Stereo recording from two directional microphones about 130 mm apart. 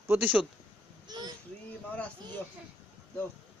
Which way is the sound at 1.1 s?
30° right (ahead or behind).